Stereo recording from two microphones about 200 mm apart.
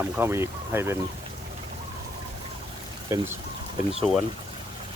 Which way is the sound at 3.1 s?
15° right (ahead or behind).